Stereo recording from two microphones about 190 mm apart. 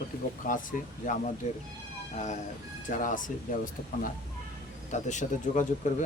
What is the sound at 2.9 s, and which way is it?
Speech, 45° left (ahead or behind).